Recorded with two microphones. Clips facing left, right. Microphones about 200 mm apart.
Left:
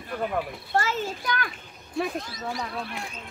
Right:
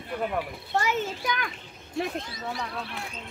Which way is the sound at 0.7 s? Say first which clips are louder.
Even; 15° right (ahead or behind).